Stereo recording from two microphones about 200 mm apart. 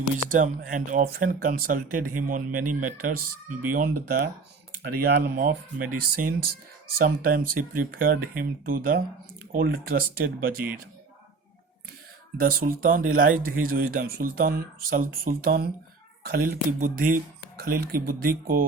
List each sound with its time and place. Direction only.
0.3 s speech: 40° right (ahead or behind)
12.4 s speech: 45° right (ahead or behind)